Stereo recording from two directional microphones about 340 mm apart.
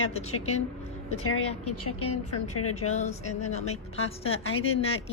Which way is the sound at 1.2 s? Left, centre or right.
Left.